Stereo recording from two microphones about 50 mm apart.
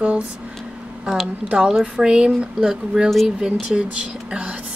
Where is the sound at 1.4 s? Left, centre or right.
Centre.